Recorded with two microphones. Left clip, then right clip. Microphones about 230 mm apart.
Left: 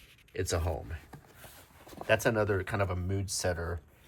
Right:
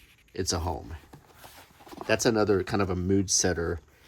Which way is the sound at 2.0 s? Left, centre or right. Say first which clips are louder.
Right 3 dB; centre.